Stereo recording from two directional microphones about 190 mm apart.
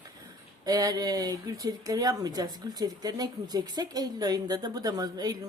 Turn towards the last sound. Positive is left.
turn(degrees=-20)  # may be behind; listen again after turning